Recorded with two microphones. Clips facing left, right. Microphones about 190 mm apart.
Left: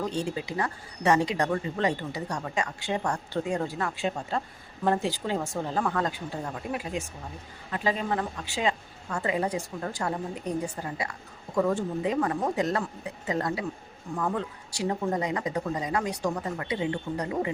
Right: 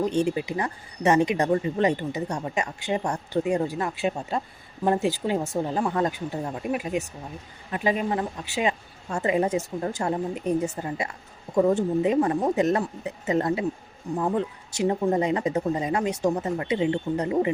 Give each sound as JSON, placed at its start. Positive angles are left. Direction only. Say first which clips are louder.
{"t": 0.0, "sound": "speech", "louder": "right 6 dB", "side_deg": -20}